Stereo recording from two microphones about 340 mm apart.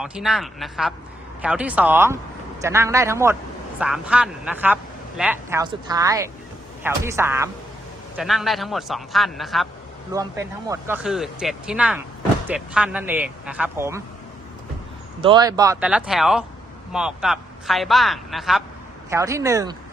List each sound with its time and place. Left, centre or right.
0.0 s speech: centre
15.2 s speech: centre